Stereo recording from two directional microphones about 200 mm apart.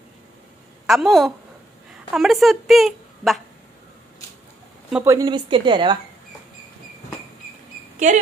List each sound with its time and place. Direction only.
0.8 s a woman's voice: centre (ahead or behind)
4.9 s a woman's voice: 15° right (ahead or behind)
8.0 s a woman's voice: 40° right (ahead or behind)